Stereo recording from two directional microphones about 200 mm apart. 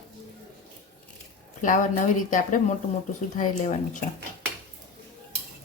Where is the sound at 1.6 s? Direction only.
40° left (ahead or behind).